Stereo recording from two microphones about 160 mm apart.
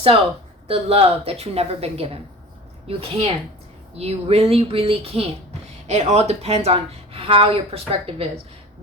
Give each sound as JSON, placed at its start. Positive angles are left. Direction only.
{"t": 0.7, "sound": "speech", "side_deg": -35}